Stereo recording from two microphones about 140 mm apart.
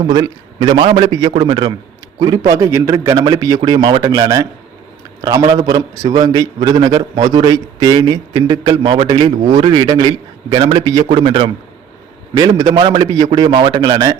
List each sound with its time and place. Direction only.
0.1 s a man's voice: 30° right (ahead or behind)
8.6 s a man's voice: 35° right (ahead or behind)
12.3 s a man's voice: 25° right (ahead or behind)